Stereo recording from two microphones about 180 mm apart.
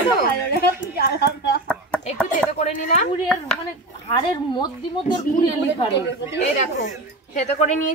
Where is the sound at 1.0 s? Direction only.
65° left (ahead or behind).